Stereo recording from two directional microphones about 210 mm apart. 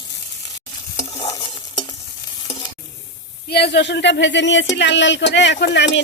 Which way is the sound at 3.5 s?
50° left (ahead or behind).